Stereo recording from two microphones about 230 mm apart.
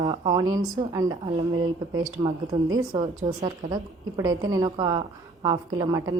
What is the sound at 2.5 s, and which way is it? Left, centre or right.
A woman's voice, centre.